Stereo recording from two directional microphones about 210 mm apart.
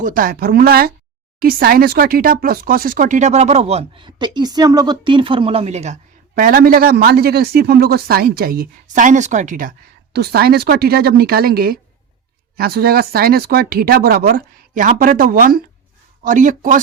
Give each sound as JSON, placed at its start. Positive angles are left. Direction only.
{"t": 0.0, "sound": "speech", "side_deg": -40}